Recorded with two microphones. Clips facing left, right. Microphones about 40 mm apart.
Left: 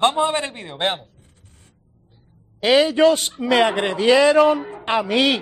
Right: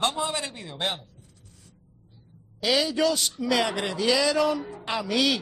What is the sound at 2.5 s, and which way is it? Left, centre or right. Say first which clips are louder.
Speech: left 8 dB; left.